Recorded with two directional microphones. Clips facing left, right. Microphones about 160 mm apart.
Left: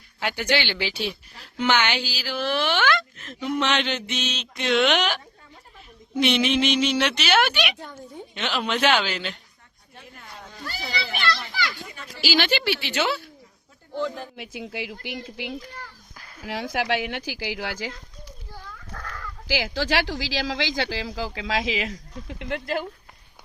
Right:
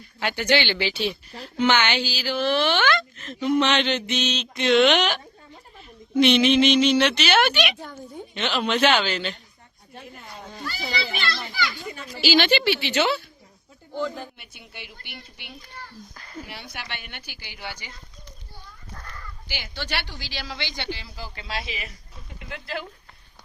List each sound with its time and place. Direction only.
0.2 s speech: 10° left (ahead or behind)
12.1 s a woman's voice: 5° left (ahead or behind)
14.3 s speech: 90° left
16.1 s a sound: centre (ahead or behind)
16.5 s a child's voice: 90° left; by 22.9 s 50° left (ahead or behind)